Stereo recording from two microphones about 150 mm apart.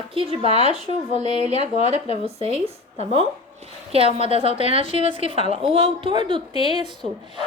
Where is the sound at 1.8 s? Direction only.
45° left (ahead or behind).